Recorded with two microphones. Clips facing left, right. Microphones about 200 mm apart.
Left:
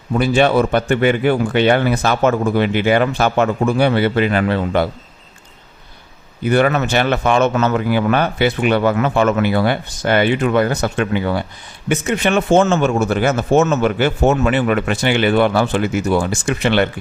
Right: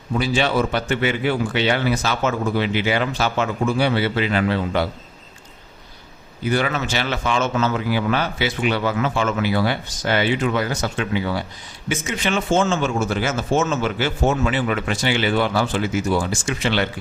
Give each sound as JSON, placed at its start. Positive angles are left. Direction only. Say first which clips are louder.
{"t": 0.2, "sound": "speech", "louder": "left 6 dB", "side_deg": 55}
{"t": 6.4, "sound": "speech", "louder": "left 7 dB", "side_deg": 60}